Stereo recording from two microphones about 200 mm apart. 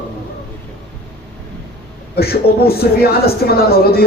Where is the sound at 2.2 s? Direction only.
50° left (ahead or behind).